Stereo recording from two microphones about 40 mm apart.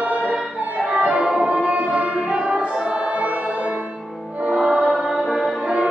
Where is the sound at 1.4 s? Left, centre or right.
Right.